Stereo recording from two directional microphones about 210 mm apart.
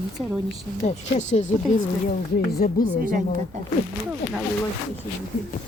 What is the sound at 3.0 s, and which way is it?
Speech, 40° right (ahead or behind).